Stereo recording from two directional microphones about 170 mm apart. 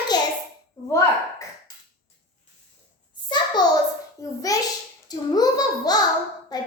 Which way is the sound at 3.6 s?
25° left (ahead or behind).